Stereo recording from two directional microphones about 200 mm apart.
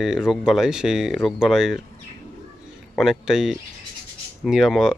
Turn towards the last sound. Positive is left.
turn(degrees=0)  # may be behind; listen again after turning